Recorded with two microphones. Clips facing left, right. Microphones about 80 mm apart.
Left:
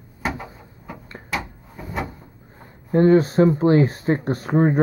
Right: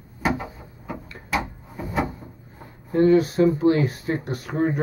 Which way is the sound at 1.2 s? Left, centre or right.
Centre.